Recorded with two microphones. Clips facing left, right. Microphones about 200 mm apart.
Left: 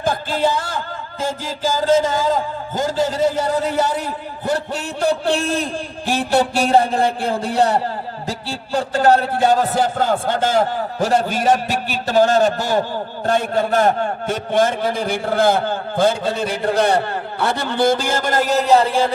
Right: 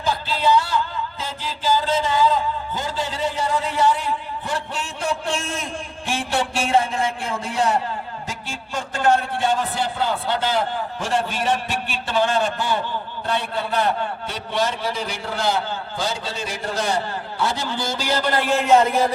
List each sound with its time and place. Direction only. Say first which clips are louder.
0.0 s a man's voice: left 3 dB; 50° left (ahead or behind); by 19.1 s 30° left (ahead or behind)